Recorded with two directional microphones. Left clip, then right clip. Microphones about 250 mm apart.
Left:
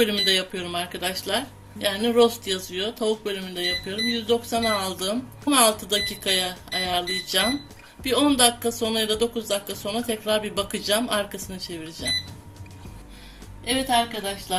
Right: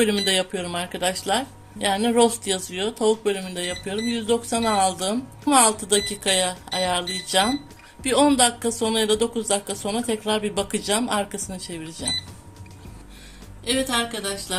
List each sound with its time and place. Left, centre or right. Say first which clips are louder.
0.0 s speech: even; right
14.0 s speech: even; centre